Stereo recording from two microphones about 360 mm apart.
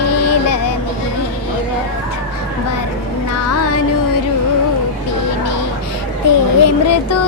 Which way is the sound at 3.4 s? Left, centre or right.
Left.